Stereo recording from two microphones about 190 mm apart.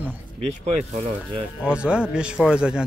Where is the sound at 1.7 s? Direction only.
5° right (ahead or behind).